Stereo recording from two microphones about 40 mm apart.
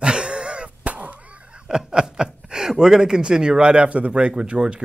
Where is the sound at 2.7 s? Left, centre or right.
Centre.